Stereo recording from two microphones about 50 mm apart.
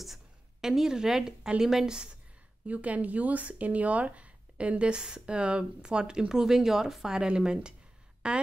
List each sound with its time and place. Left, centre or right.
0.0 s a sound: centre
1.6 s a woman's voice: centre
2.6 s a woman's voice: right